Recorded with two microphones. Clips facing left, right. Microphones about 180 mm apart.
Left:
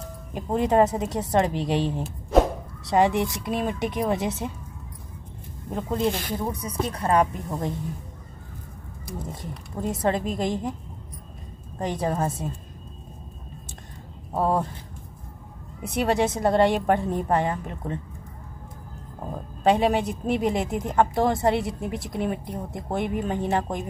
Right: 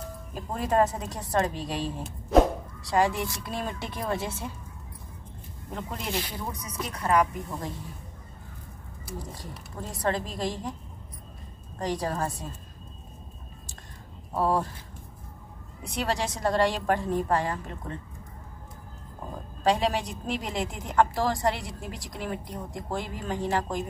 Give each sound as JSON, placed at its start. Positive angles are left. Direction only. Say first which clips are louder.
{"t": 0.3, "sound": "a woman's voice", "louder": "left 6 dB", "side_deg": 20}
{"t": 6.2, "sound": "speech", "louder": "left 8 dB", "side_deg": 45}
{"t": 6.5, "sound": "speech", "louder": "left 7 dB", "side_deg": 30}
{"t": 9.2, "sound": "a woman's voice", "louder": "left 5 dB", "side_deg": 25}
{"t": 11.8, "sound": "a woman's voice", "louder": "left 3 dB", "side_deg": 20}
{"t": 14.3, "sound": "a woman's voice", "louder": "left 2 dB", "side_deg": 20}
{"t": 15.8, "sound": "a woman's voice", "louder": "left 7 dB", "side_deg": 20}
{"t": 19.6, "sound": "a woman's voice", "louder": "left 5 dB", "side_deg": 20}